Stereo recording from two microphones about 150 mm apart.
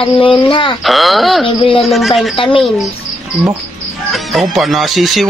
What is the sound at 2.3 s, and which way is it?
Speech, 35° left (ahead or behind).